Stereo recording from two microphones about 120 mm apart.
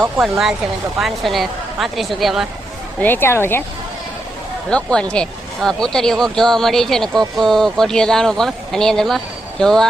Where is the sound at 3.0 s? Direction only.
20° left (ahead or behind).